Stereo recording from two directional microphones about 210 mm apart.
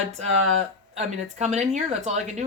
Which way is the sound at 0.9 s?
30° right (ahead or behind).